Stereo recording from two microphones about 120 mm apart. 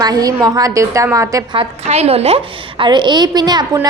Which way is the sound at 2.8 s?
40° right (ahead or behind).